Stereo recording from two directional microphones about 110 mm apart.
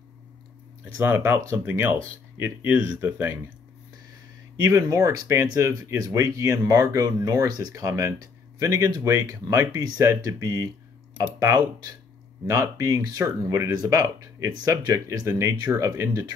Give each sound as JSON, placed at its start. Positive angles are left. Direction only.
{"t": 0.9, "sound": "speech", "side_deg": -20}
{"t": 4.6, "sound": "speech", "side_deg": -30}